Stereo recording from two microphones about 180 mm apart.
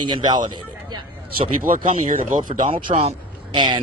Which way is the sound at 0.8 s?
25° right (ahead or behind).